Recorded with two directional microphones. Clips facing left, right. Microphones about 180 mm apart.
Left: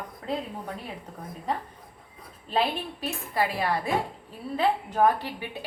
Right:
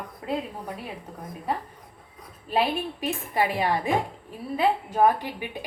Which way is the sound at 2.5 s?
10° right (ahead or behind).